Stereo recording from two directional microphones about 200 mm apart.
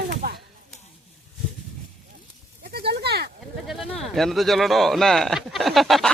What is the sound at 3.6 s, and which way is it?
Speech, centre (ahead or behind).